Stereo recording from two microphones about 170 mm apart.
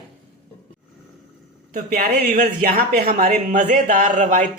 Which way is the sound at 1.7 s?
55° right (ahead or behind).